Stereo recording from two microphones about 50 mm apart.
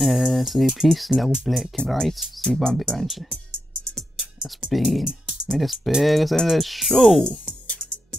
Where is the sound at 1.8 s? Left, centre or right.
Left.